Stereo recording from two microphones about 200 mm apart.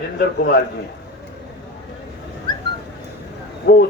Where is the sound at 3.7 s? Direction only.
50° left (ahead or behind).